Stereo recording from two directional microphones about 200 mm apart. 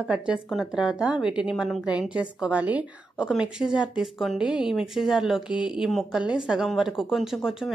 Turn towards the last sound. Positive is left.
turn(degrees=0)  # may be behind; listen again after turning